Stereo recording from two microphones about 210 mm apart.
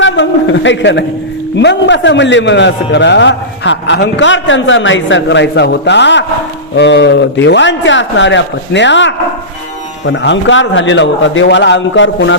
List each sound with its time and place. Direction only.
0.0 s a man's voice: 60° left (ahead or behind)